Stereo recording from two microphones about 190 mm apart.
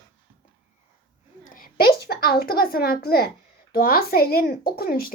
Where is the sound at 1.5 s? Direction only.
55° left (ahead or behind).